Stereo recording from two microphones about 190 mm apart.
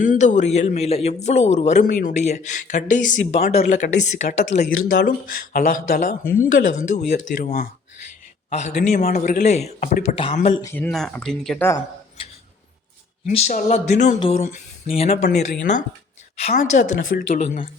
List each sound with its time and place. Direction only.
0.0 s a man's voice: 40° left (ahead or behind)
8.4 s a man's voice: 40° left (ahead or behind)
9.0 s a man's voice: 50° left (ahead or behind); by 10.5 s 30° left (ahead or behind)
10.6 s speech: 15° left (ahead or behind)
12.2 s a sound: 30° left (ahead or behind)
13.2 s a man's voice: 40° left (ahead or behind)
16.4 s a man's voice: 40° left (ahead or behind)